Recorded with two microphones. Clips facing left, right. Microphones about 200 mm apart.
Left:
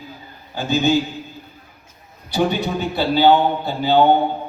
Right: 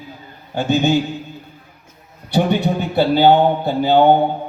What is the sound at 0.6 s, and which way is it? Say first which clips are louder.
Speech: right 2 dB; 65° right (ahead or behind).